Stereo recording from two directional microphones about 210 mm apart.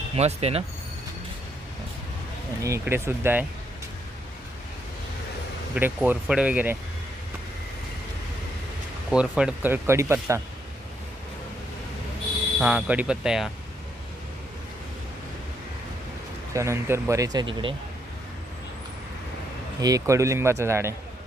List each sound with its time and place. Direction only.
0.2 s speech: 30° right (ahead or behind)
2.6 s speech: 15° right (ahead or behind)
5.7 s speech: 10° right (ahead or behind)
9.0 s speech: 5° right (ahead or behind)
12.5 s speech: 5° right (ahead or behind)
16.6 s speech: 15° right (ahead or behind)
19.8 s speech: 15° right (ahead or behind)